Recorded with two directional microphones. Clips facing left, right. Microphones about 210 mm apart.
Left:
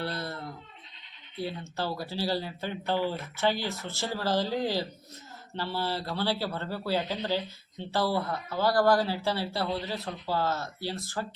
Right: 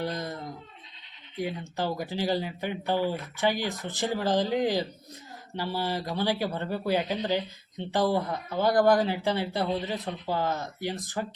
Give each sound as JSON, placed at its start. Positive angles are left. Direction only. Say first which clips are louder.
{"t": 0.0, "sound": "speech", "louder": "right 2 dB", "side_deg": -15}